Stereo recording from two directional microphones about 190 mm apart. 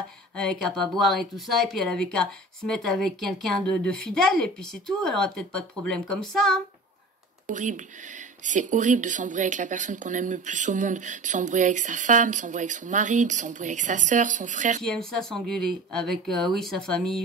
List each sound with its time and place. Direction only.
0.4 s speech: 5° left (ahead or behind)
7.4 s speech: 40° right (ahead or behind)
14.8 s speech: 5° left (ahead or behind)